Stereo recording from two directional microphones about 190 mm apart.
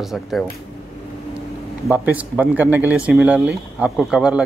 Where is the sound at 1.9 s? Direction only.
10° right (ahead or behind).